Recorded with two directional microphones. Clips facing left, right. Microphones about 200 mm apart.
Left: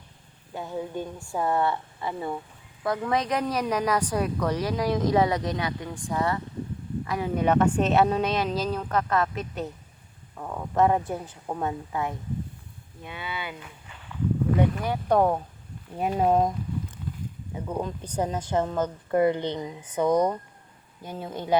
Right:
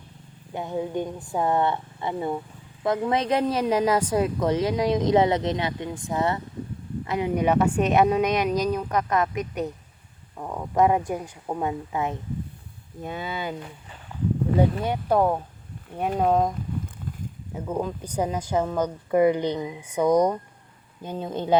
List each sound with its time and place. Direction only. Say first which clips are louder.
0.5 s speech: right 4 dB; 20° right (ahead or behind)
13.0 s speech: right 5 dB; 40° right (ahead or behind)
14.1 s a sound: right 1 dB; 30° right (ahead or behind)
15.1 s speech: even; centre (ahead or behind)
17.5 s speech: right 3 dB; 5° right (ahead or behind); by 21.5 s 20° right (ahead or behind)